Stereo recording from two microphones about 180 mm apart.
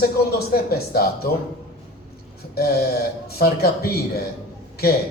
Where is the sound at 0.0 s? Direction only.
60° left (ahead or behind).